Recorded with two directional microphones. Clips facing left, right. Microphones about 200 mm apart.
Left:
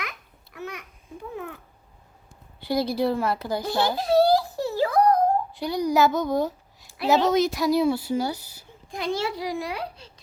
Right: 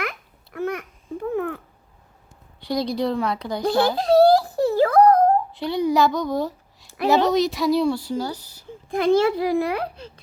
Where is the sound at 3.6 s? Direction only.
55° right (ahead or behind).